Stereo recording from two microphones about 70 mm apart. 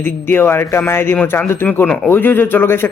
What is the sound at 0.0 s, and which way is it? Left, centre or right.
Speech, left.